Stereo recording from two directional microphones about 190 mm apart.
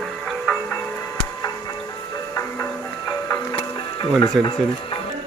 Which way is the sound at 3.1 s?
20° left (ahead or behind).